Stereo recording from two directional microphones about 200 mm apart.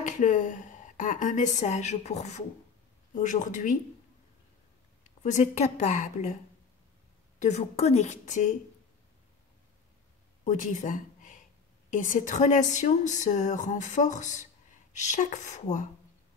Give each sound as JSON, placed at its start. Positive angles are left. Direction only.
{"t": 0.0, "sound": "speech", "side_deg": 40}
{"t": 5.2, "sound": "speech", "side_deg": 40}
{"t": 7.3, "sound": "speech", "side_deg": 35}
{"t": 10.4, "sound": "speech", "side_deg": 40}